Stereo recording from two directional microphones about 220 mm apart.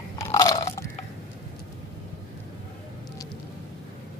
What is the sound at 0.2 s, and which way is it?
Chewing, 15° left (ahead or behind).